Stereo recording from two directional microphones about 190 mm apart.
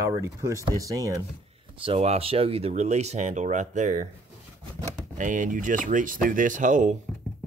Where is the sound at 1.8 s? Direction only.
35° right (ahead or behind).